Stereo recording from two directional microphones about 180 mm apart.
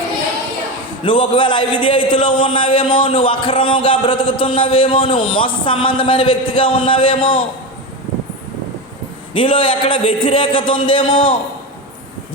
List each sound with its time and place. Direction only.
1.0 s a man's voice: 25° left (ahead or behind)
9.3 s a man's voice: 30° left (ahead or behind)